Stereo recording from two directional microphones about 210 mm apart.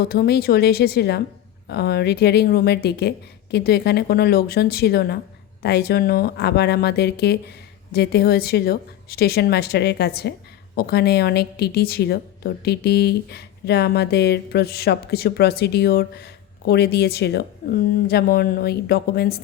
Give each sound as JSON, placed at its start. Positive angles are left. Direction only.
{"t": 0.0, "sound": "a woman's voice", "side_deg": 45}